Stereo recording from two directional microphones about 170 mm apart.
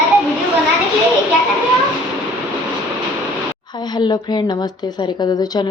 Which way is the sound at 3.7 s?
25° left (ahead or behind).